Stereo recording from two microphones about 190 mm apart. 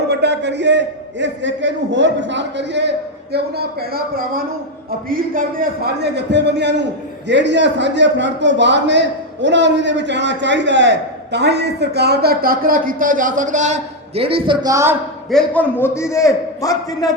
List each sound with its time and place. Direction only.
0.1 s a man's voice: 60° right (ahead or behind)
3.3 s a man's voice: 55° right (ahead or behind); by 14.9 s 15° right (ahead or behind)
15.3 s a man's voice: 5° left (ahead or behind)